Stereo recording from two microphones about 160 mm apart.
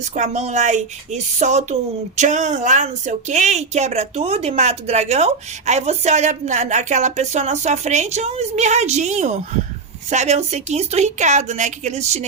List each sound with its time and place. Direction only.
0.0 s a woman's voice: 45° right (ahead or behind)